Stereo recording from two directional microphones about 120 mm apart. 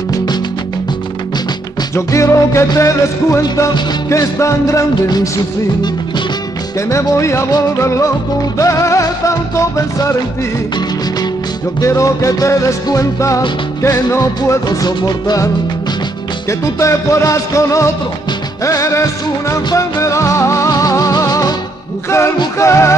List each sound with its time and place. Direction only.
2.0 s music: 25° left (ahead or behind)
6.9 s music: 25° left (ahead or behind)
11.8 s music: 25° left (ahead or behind)
22.6 s music: 25° left (ahead or behind)